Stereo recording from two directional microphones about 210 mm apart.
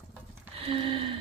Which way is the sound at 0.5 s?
25° right (ahead or behind).